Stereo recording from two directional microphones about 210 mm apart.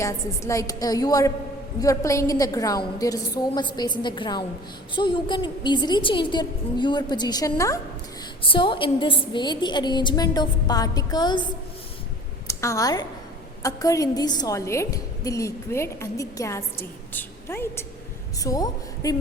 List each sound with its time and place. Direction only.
0.0 s a woman's voice: 15° left (ahead or behind)
12.5 s a woman's voice: 15° left (ahead or behind)